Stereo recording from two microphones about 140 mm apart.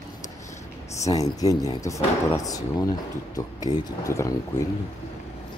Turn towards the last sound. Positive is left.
turn(degrees=25)  # may be behind; listen again after turning